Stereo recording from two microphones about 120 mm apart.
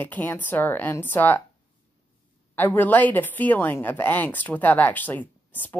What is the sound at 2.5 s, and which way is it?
Speech, 15° left (ahead or behind).